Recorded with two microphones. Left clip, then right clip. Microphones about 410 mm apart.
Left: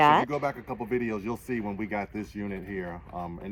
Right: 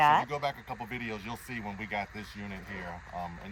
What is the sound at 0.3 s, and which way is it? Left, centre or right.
Speech, right.